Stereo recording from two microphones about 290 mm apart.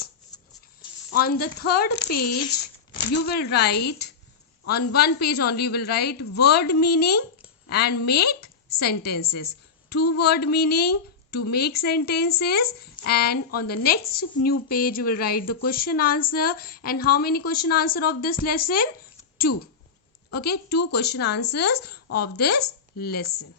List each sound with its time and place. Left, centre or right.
1.2 s a woman's voice: left
19.5 s speech: left
20.3 s a woman's voice: left